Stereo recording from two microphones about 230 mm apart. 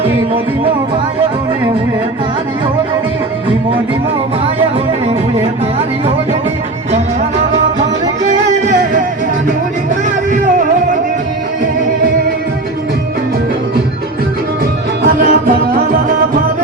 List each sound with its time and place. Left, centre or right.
15.0 s music: right